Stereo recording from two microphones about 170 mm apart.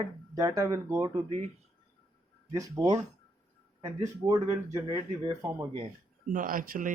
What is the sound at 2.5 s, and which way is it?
Speech, 20° right (ahead or behind).